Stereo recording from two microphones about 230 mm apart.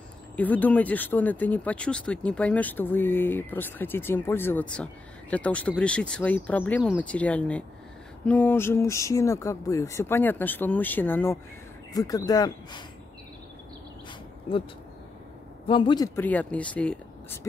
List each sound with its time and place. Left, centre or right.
0.4 s speech: centre
14.5 s a man's voice: left
16.2 s speech: centre